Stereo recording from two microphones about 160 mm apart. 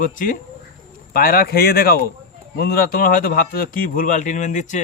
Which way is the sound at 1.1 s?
65° left (ahead or behind).